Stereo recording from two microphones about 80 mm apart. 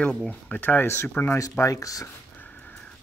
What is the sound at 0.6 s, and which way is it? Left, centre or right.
Speech, left.